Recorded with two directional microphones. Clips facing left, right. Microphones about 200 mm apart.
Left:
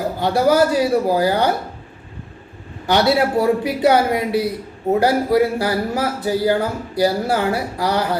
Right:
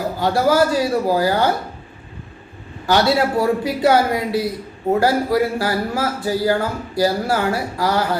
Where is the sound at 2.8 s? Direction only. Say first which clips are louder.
Even; 20° left (ahead or behind).